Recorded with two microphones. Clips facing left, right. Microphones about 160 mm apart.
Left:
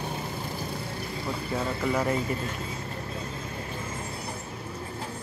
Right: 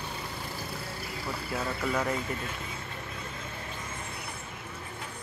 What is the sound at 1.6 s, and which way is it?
Speech, 20° left (ahead or behind).